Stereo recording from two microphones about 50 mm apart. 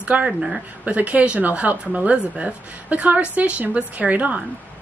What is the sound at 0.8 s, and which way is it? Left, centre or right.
A woman's voice, right.